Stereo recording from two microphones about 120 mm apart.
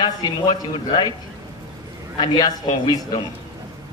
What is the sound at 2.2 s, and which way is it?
A man's voice, 35° left (ahead or behind).